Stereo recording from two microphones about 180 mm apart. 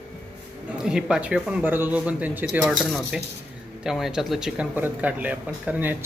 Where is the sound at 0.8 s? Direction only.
5° right (ahead or behind).